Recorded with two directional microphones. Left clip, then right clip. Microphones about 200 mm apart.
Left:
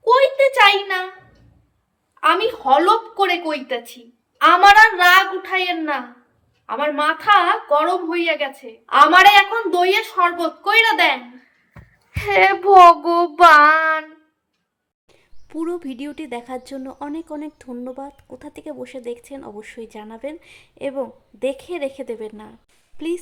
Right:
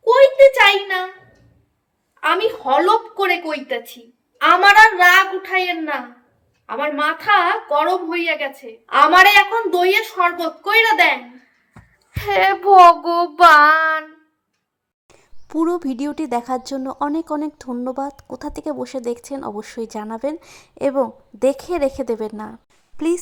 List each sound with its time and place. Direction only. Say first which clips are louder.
0.1 s a sound: right 4 dB; 5° right (ahead or behind)
2.2 s a woman's voice: left 1 dB; 5° right (ahead or behind)
12.2 s a woman's voice: left 1 dB; centre (ahead or behind)
15.1 s speech: right 7 dB; 20° right (ahead or behind)